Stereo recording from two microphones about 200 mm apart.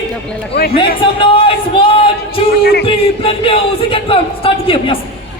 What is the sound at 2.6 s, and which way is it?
Music, 50° left (ahead or behind).